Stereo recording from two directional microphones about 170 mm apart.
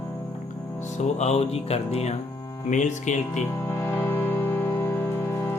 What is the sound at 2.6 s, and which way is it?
Mantra, 45° left (ahead or behind).